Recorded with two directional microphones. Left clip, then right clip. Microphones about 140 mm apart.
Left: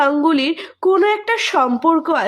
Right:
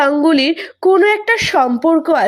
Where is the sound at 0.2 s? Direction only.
15° right (ahead or behind).